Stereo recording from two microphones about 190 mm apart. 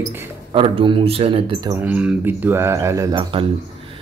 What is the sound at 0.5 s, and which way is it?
Speech, 25° right (ahead or behind).